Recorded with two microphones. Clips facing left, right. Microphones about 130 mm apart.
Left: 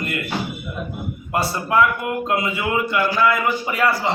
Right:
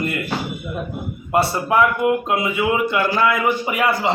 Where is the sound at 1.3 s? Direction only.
25° right (ahead or behind).